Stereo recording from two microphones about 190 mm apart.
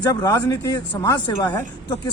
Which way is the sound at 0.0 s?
20° left (ahead or behind).